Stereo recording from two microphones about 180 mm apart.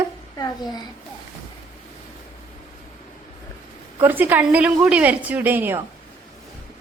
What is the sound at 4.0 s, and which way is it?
A woman's voice, 10° right (ahead or behind).